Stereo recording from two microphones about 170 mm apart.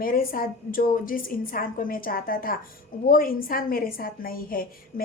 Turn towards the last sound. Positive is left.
turn(degrees=60)  # may be behind; listen again after turning